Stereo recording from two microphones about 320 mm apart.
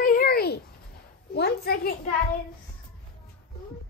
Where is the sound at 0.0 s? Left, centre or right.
Left.